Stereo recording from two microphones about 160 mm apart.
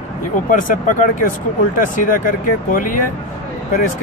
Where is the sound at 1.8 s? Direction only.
55° left (ahead or behind).